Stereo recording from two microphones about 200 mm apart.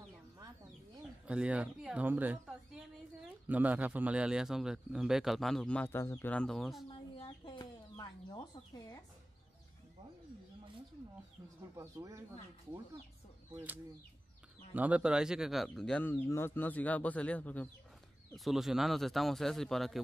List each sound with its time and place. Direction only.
1.2 s a man's voice: 5° right (ahead or behind)
6.9 s chicken: 25° left (ahead or behind)
8.0 s a sound: 20° left (ahead or behind)
11.7 s speech: 15° right (ahead or behind)
13.5 s a man's voice: 10° right (ahead or behind)